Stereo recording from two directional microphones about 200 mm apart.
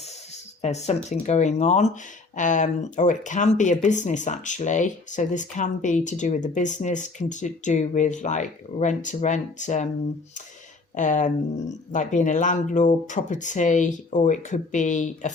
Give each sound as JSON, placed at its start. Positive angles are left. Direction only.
{"t": 0.6, "sound": "speech", "side_deg": 35}
{"t": 10.9, "sound": "speech", "side_deg": 40}